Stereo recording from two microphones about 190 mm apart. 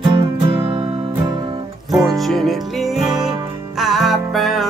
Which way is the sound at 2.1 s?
Centre (ahead or behind).